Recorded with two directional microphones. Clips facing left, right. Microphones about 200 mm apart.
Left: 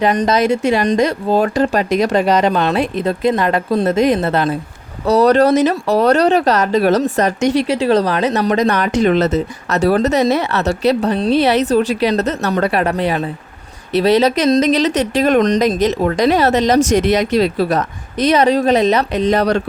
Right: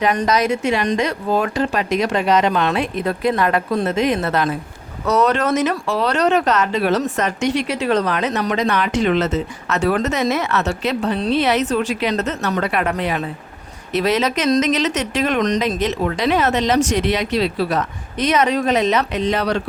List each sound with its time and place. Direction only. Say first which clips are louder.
0.0 s speech: left 3 dB; 25° left (ahead or behind); by 19.6 s 45° left (ahead or behind)